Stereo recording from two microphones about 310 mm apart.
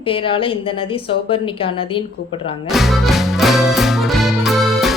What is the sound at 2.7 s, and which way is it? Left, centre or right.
Music, centre.